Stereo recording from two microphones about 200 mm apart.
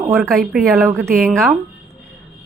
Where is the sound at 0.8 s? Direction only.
15° right (ahead or behind).